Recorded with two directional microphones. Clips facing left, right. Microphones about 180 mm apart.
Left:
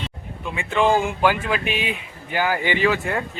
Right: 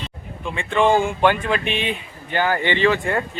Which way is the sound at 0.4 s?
5° left (ahead or behind).